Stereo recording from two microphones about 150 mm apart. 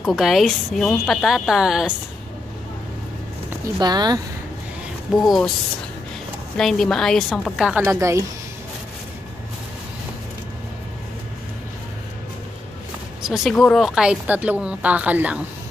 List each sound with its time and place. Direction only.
0.0 s a woman's voice: centre (ahead or behind)
3.8 s speech: 30° right (ahead or behind)
5.1 s a woman's voice: centre (ahead or behind)
6.5 s a woman's voice: 5° left (ahead or behind)
7.9 s speech: 20° right (ahead or behind)
13.3 s speech: centre (ahead or behind)